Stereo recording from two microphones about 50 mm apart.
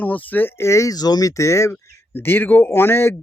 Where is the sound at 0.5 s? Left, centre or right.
Left.